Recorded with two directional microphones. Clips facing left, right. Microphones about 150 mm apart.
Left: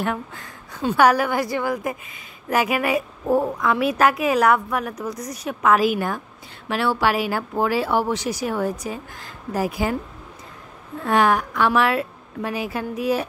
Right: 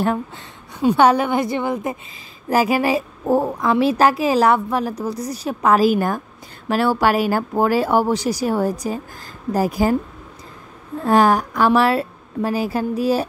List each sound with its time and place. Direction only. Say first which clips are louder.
0.0 s a woman's voice: right 5 dB; 35° right (ahead or behind)
11.0 s a woman's voice: right 4 dB; 35° right (ahead or behind)